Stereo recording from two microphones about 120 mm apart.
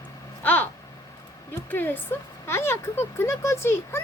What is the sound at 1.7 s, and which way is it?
Speech, 15° left (ahead or behind).